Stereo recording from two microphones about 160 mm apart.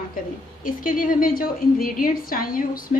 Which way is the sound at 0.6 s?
60° left (ahead or behind).